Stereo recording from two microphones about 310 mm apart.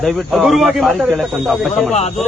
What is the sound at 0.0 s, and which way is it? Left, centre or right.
Speech, centre.